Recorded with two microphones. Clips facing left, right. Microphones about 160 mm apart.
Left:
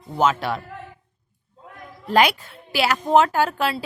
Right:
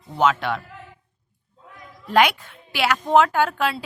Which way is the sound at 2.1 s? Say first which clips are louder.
Even; 35° left (ahead or behind).